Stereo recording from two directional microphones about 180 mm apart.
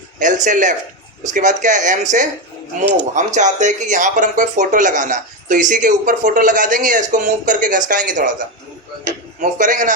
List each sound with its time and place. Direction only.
0.2 s a man's voice: 45° right (ahead or behind)
9.4 s speech: 45° right (ahead or behind)